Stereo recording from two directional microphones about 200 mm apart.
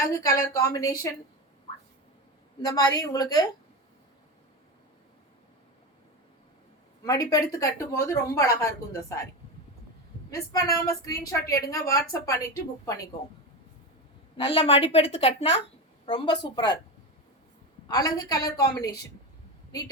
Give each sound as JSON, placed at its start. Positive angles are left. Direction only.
{"t": 0.0, "sound": "a woman's voice", "side_deg": 15}
{"t": 2.6, "sound": "a woman's voice", "side_deg": 20}
{"t": 7.0, "sound": "a woman's voice", "side_deg": 20}
{"t": 10.3, "sound": "a woman's voice", "side_deg": 15}
{"t": 14.3, "sound": "a woman's voice", "side_deg": 30}
{"t": 17.8, "sound": "a woman's voice", "side_deg": 20}